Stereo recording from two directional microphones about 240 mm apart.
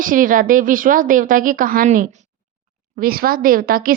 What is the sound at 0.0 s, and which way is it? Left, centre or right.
Speech, right.